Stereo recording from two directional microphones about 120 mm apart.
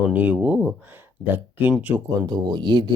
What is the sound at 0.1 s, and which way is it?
Speech, 15° right (ahead or behind).